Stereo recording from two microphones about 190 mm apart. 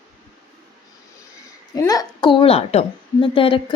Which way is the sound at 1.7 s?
20° left (ahead or behind).